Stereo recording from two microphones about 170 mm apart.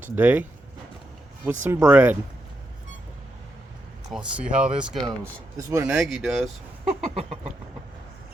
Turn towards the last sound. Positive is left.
turn(degrees=-35)  # may be behind; listen again after turning